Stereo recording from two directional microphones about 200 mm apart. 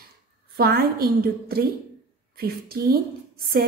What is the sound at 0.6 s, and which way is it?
A woman's voice, 50° right (ahead or behind).